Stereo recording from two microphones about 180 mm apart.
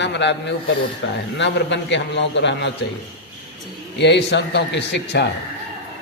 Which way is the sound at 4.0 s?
75° left (ahead or behind).